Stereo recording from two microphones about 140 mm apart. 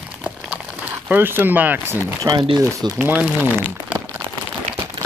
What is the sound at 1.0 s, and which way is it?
Speech, 15° right (ahead or behind).